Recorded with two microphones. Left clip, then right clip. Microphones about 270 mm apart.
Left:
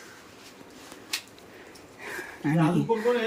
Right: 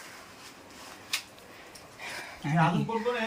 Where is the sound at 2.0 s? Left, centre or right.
Centre.